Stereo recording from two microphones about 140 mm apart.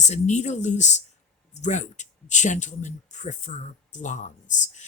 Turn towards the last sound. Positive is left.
turn(degrees=60)  # may be behind; listen again after turning